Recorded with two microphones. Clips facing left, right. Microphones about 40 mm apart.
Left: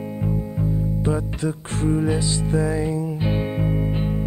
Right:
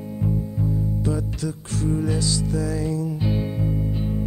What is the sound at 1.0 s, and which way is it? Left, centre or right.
Music, left.